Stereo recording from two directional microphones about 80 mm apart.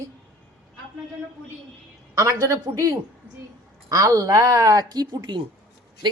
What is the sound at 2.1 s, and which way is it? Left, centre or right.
Speech, right.